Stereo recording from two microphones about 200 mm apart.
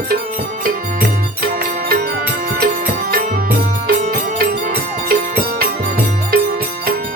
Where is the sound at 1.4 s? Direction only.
50° right (ahead or behind).